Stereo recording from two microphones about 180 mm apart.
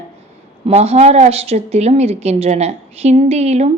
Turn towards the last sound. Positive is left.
turn(degrees=-35)  # may be behind; listen again after turning